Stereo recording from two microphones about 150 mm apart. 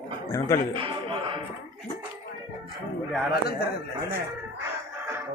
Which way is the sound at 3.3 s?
90° left.